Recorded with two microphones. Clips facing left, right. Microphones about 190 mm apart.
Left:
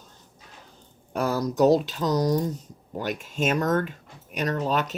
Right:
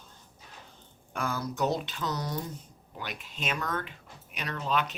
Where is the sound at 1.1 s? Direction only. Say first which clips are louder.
Left 8 dB; 40° left (ahead or behind).